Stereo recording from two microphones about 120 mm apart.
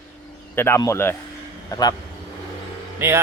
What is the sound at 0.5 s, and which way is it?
Speech, 20° left (ahead or behind).